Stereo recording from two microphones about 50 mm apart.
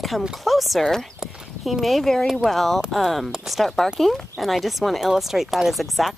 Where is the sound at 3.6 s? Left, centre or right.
Centre.